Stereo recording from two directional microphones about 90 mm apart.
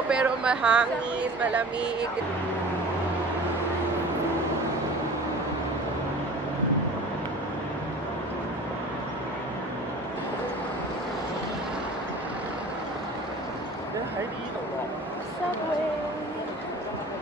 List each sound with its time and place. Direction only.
0.1 s a woman's voice: 10° right (ahead or behind)